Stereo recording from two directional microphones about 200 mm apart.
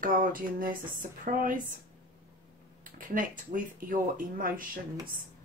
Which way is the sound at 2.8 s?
40° right (ahead or behind).